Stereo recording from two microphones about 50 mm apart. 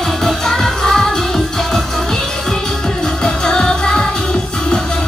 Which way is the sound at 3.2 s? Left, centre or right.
Centre.